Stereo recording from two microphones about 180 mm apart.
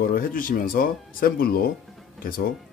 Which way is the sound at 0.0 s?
55° left (ahead or behind).